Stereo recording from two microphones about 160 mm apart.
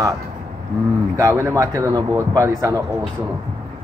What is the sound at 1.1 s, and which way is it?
Speech, 20° right (ahead or behind).